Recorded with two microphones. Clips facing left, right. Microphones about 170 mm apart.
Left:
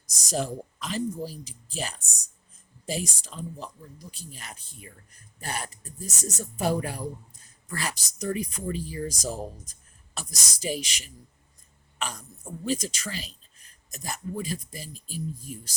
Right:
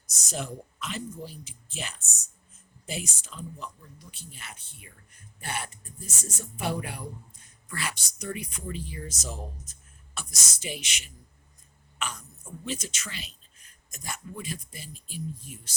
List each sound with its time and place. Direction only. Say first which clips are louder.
0.3 s speech: left 6 dB; 35° left (ahead or behind)